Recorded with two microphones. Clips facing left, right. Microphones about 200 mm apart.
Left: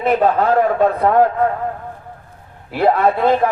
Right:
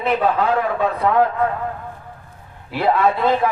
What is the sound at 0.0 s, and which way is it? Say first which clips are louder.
A man's voice: left 3 dB; 45° left (ahead or behind).